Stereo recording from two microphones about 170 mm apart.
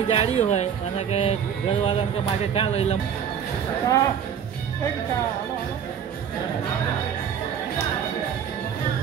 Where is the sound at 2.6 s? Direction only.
35° left (ahead or behind).